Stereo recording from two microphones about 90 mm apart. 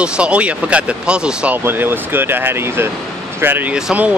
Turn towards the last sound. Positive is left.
turn(degrees=-10)  # may be behind; listen again after turning